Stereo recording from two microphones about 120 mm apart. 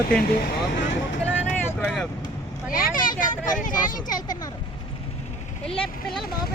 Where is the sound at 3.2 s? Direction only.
90° left.